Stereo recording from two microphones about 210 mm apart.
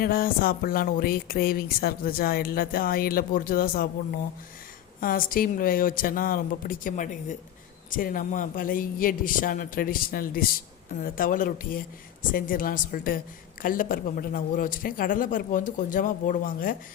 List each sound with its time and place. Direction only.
0.0 s speech: 45° left (ahead or behind)